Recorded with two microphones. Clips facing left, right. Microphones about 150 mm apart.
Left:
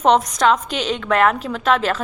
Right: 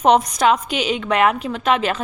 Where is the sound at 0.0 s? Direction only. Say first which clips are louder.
Even; 5° right (ahead or behind).